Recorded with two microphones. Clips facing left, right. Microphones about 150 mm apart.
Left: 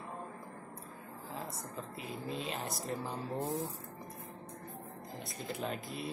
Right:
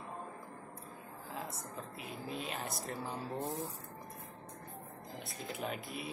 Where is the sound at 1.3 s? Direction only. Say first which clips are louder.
Left 1 dB; centre (ahead or behind).